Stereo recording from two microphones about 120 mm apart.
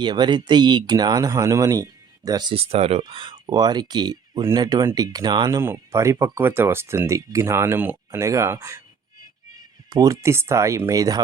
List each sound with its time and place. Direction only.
0.0 s speech: 40° right (ahead or behind)
2.5 s speech: 55° right (ahead or behind)
3.0 s speech: 45° right (ahead or behind)
5.5 s speech: 25° right (ahead or behind)
9.9 s speech: 30° right (ahead or behind)